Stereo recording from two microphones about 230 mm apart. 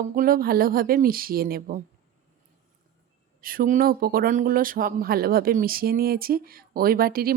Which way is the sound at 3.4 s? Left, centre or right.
Right.